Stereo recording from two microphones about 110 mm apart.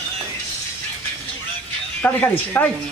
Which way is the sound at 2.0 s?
20° left (ahead or behind).